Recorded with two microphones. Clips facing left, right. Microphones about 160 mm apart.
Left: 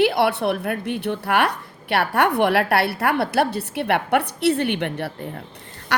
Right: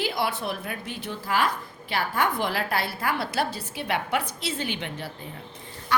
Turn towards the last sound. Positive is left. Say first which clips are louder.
# left 2 dB
turn(degrees=75)  # may be behind; listen again after turning